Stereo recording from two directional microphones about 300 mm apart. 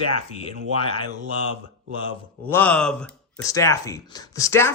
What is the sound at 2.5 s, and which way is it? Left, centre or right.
Speech, centre.